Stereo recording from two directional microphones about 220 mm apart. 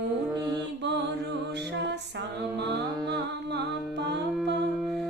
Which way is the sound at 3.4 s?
50° right (ahead or behind).